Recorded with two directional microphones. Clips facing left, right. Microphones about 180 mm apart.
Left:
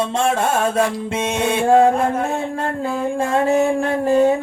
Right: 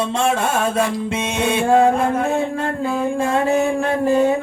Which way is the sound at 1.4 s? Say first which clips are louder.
Left 1 dB; 45° left (ahead or behind).